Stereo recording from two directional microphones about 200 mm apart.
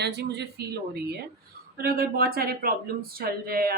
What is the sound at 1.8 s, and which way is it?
A woman's voice, 50° right (ahead or behind).